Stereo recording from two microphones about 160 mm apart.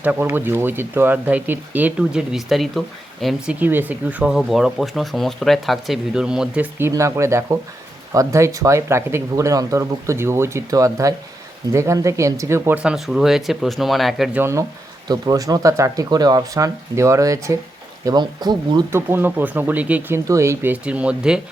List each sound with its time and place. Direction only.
0.0 s speech: 10° right (ahead or behind)
6.7 s speech: 15° right (ahead or behind)
15.0 s speech: 25° right (ahead or behind)
18.9 s speech: 15° right (ahead or behind)